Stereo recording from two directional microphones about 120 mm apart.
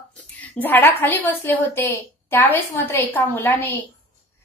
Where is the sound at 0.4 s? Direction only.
15° left (ahead or behind).